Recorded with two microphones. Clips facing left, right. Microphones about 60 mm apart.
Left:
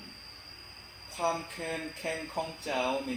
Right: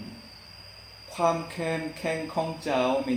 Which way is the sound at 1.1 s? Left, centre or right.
Right.